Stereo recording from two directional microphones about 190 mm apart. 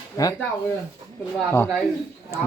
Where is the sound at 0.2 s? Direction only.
20° left (ahead or behind).